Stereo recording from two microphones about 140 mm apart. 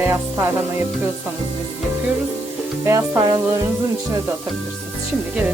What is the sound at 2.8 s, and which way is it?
Music, 20° right (ahead or behind).